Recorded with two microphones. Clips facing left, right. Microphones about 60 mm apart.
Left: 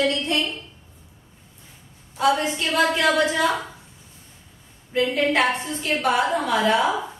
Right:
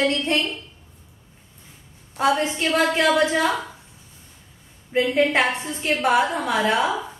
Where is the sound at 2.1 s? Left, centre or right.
Right.